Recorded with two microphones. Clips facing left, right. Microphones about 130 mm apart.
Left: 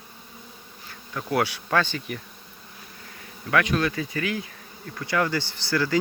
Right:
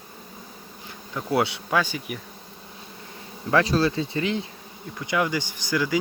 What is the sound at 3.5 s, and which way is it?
Speech, 30° right (ahead or behind).